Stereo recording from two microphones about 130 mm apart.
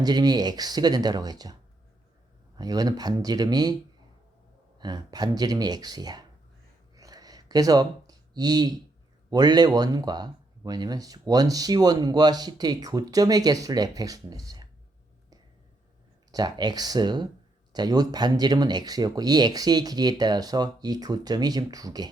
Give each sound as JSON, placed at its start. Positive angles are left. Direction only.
{"t": 0.0, "sound": "speech", "side_deg": -30}
{"t": 2.6, "sound": "speech", "side_deg": -30}
{"t": 4.8, "sound": "speech", "side_deg": -30}
{"t": 6.9, "sound": "a sound", "side_deg": -30}
{"t": 9.3, "sound": "speech", "side_deg": -30}
{"t": 16.3, "sound": "speech", "side_deg": -30}